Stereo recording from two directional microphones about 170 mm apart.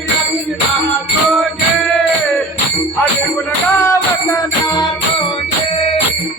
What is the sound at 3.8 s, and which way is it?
Music, 20° left (ahead or behind).